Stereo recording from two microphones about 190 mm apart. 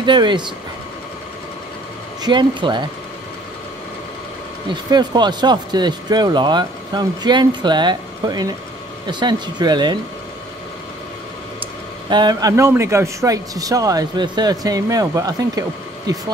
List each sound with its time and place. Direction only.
0.0 s speech: 25° right (ahead or behind)
2.2 s speech: 25° right (ahead or behind)
4.6 s speech: 25° right (ahead or behind)
12.1 s speech: 20° right (ahead or behind)